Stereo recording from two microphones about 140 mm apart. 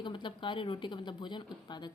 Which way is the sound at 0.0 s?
35° left (ahead or behind).